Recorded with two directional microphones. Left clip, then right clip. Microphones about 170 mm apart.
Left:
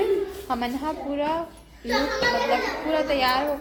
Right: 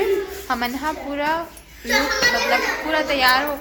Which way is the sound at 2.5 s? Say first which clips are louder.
Right 4 dB; 5° left (ahead or behind).